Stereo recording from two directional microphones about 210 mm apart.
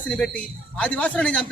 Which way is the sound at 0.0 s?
5° left (ahead or behind).